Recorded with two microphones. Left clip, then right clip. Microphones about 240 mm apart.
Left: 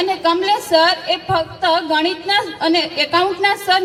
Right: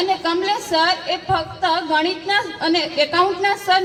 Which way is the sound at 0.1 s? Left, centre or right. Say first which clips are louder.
Left 3 dB; left.